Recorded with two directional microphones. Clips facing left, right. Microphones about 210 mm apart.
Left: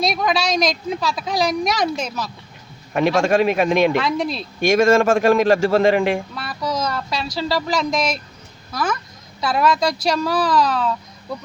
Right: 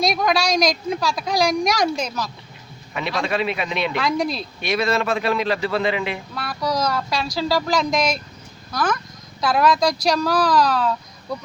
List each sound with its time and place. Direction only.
0.0 s a woman's voice: centre (ahead or behind)
2.9 s speech: 45° left (ahead or behind)
3.9 s a woman's voice: 5° left (ahead or behind)
4.6 s speech: 45° left (ahead or behind)
6.3 s a woman's voice: centre (ahead or behind)